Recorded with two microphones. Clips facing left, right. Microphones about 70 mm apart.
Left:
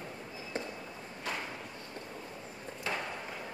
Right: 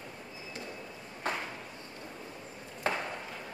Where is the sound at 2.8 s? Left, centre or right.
Right.